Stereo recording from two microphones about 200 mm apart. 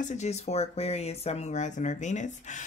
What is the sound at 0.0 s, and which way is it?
Speech, 35° left (ahead or behind).